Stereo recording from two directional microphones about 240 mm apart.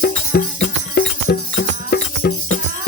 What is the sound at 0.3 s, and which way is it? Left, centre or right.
Music, left.